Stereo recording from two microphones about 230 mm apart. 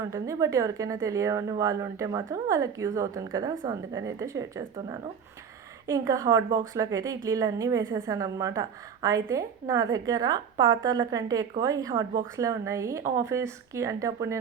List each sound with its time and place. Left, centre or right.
0.0 s a woman's voice: centre